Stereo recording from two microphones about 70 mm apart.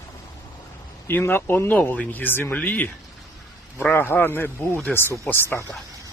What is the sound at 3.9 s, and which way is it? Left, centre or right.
A man's voice, left.